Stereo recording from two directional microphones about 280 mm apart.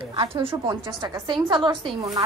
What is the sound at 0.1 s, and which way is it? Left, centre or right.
A woman's voice, centre.